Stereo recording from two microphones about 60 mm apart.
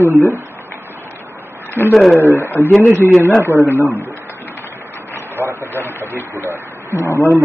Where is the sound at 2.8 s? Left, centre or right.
Right.